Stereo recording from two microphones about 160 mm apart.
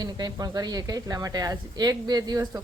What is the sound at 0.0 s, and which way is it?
Speech, 25° right (ahead or behind).